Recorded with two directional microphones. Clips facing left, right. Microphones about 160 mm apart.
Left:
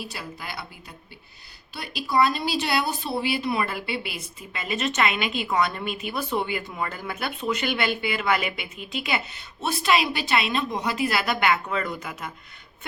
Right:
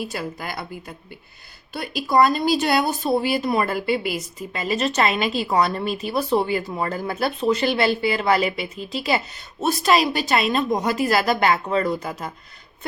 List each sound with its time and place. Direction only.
0.0 s speech: 50° right (ahead or behind)